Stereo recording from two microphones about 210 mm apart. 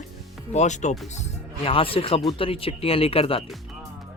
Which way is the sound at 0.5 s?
35° left (ahead or behind).